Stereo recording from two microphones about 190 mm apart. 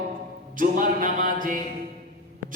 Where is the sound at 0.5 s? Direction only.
45° right (ahead or behind).